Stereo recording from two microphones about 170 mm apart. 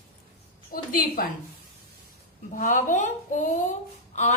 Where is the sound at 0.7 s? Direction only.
55° left (ahead or behind).